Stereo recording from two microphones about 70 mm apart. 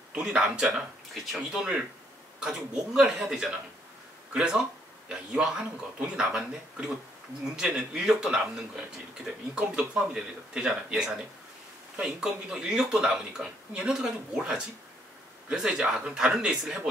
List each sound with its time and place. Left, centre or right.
0.1 s speech: centre
1.1 s speech: centre
1.5 s speech: centre